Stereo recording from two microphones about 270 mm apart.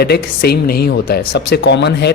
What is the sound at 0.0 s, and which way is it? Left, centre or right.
A man's voice, left.